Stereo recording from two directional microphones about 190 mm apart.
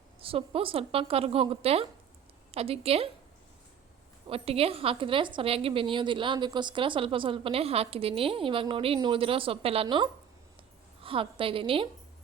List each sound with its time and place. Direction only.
0.2 s a woman's voice: 30° right (ahead or behind)
4.3 s a woman's voice: 30° right (ahead or behind)